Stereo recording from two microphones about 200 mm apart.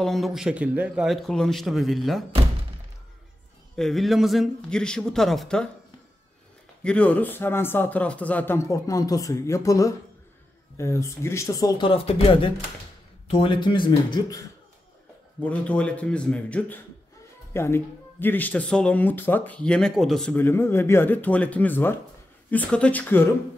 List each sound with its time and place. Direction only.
0.0 s speech: centre (ahead or behind)
3.7 s speech: centre (ahead or behind)
6.8 s speech: 5° left (ahead or behind); by 14.4 s 25° left (ahead or behind)
15.4 s speech: 5° left (ahead or behind)